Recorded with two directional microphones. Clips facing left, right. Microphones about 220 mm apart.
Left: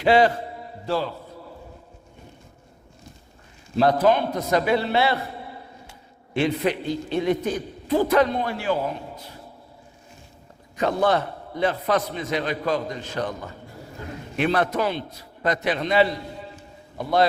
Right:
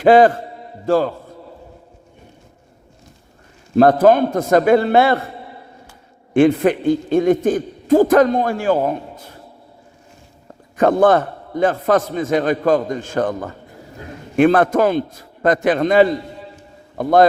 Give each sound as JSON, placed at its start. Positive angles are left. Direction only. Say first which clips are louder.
{"t": 0.0, "sound": "a man's voice", "louder": "right 7 dB", "side_deg": -50}
{"t": 3.8, "sound": "a man's voice", "louder": "right 7 dB", "side_deg": -50}
{"t": 6.3, "sound": "a man's voice", "louder": "right 9 dB", "side_deg": -50}
{"t": 10.8, "sound": "a man's voice", "louder": "right 8 dB", "side_deg": -50}